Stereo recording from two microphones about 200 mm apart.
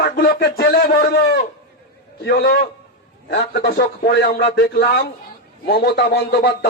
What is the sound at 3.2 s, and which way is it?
Speech, 60° left (ahead or behind).